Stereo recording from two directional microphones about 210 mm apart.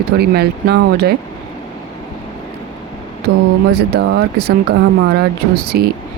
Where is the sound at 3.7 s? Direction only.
50° right (ahead or behind).